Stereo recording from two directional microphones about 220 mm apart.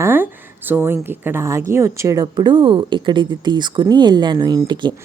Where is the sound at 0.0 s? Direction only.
10° right (ahead or behind).